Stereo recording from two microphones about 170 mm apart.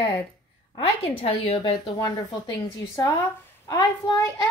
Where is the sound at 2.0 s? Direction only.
20° left (ahead or behind).